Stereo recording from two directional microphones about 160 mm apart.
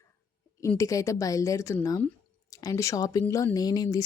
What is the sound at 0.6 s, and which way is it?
A woman's voice, 20° left (ahead or behind).